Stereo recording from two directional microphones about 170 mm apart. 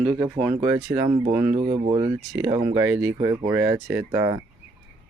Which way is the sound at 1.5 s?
30° right (ahead or behind).